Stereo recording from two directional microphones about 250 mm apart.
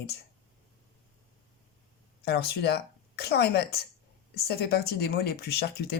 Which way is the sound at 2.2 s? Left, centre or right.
Left.